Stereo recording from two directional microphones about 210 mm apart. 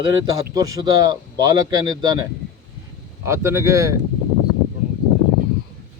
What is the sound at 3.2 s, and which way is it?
Speech, 10° right (ahead or behind).